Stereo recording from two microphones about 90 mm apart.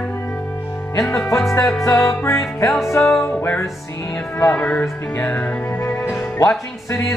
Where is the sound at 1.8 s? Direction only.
35° left (ahead or behind).